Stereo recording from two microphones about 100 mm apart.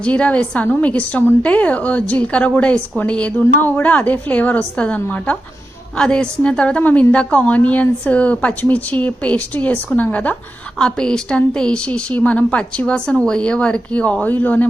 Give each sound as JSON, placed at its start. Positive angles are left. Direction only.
{"t": 0.0, "sound": "speech", "side_deg": 10}